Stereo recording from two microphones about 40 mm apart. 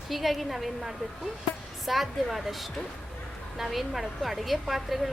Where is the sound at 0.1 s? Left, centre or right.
Centre.